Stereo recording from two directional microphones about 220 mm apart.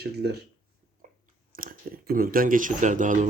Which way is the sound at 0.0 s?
45° right (ahead or behind).